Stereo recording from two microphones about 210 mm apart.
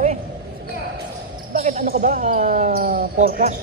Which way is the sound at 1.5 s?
35° right (ahead or behind).